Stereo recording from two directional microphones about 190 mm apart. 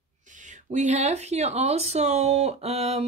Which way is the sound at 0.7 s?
40° right (ahead or behind).